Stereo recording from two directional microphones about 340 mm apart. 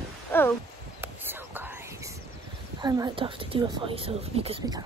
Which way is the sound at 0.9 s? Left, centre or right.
Centre.